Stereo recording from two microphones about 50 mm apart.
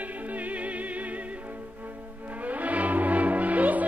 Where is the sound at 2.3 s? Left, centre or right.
Right.